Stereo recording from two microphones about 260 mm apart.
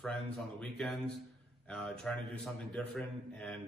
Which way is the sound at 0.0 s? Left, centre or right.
Centre.